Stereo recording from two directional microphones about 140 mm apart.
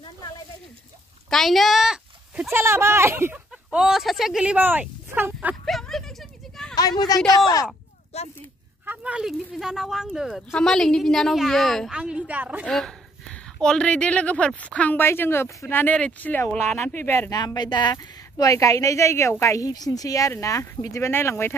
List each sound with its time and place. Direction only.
1.3 s speech: centre (ahead or behind)
2.5 s speech: 20° right (ahead or behind)
3.7 s speech: 5° right (ahead or behind)
5.7 s a sound: centre (ahead or behind)
6.7 s speech: 30° left (ahead or behind)
8.1 s speech: 50° left (ahead or behind)
8.8 s speech: 10° right (ahead or behind)
12.6 s speech: 5° left (ahead or behind)
17.3 s speech: 30° left (ahead or behind)